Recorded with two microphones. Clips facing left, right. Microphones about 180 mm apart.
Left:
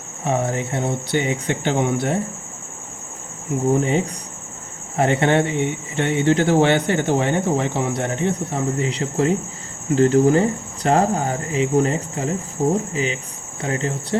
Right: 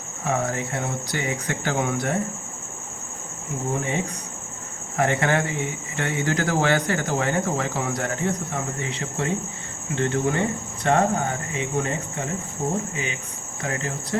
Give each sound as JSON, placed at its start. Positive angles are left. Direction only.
{"t": 0.3, "sound": "speech", "side_deg": 25}
{"t": 3.8, "sound": "speech", "side_deg": 30}